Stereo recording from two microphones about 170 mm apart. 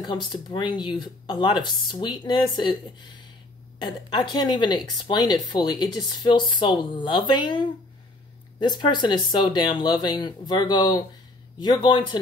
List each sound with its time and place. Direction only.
0.0 s speech: 25° left (ahead or behind)
3.8 s speech: 25° left (ahead or behind)